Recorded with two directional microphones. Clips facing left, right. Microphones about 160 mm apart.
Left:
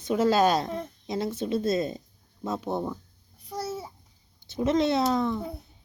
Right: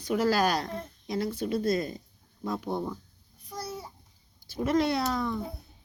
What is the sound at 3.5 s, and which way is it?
Babbling, 25° left (ahead or behind).